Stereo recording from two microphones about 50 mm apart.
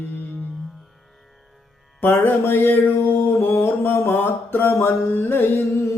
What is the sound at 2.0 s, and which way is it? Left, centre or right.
Mantra, left.